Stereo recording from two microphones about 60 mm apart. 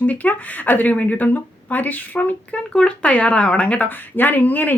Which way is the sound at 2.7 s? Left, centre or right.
Centre.